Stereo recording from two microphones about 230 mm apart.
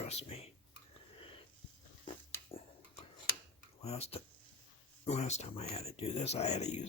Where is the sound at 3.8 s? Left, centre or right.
Left.